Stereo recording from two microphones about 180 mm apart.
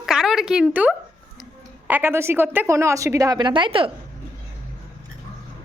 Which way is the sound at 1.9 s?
10° right (ahead or behind).